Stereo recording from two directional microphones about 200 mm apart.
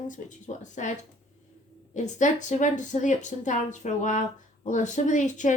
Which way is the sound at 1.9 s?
40° left (ahead or behind).